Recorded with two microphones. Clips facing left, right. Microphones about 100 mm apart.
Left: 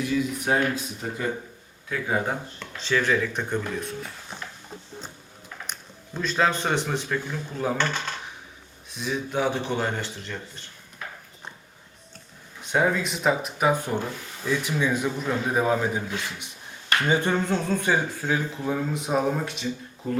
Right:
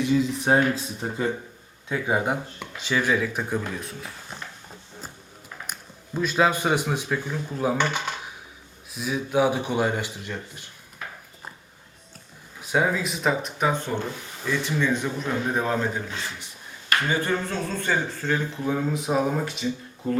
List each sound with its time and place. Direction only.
0.0 s speech: 25° right (ahead or behind)
1.9 s speech: 15° right (ahead or behind); by 4.4 s centre (ahead or behind)
5.7 s a sound: 5° right (ahead or behind)
6.1 s speech: 10° right (ahead or behind)
12.6 s a man's voice: 5° right (ahead or behind)